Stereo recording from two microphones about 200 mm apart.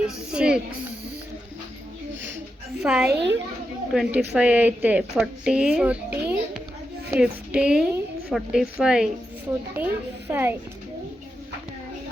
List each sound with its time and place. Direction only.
0.3 s speech: 5° right (ahead or behind)
2.8 s speech: centre (ahead or behind)
3.1 s a child's voice: 60° right (ahead or behind)
3.9 s a woman's voice: 5° right (ahead or behind)